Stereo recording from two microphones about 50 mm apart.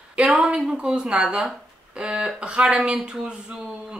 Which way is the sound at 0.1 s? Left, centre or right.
Centre.